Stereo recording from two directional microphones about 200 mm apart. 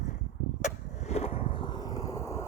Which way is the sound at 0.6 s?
35° left (ahead or behind).